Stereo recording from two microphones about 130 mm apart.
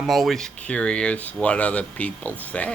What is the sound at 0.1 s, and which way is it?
Speech, centre (ahead or behind).